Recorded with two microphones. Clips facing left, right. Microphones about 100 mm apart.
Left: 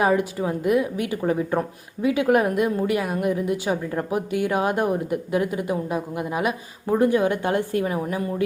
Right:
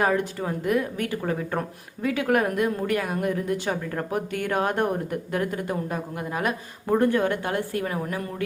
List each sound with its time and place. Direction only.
0.0 s a woman's voice: 15° left (ahead or behind)
7.1 s a woman's voice: 15° left (ahead or behind)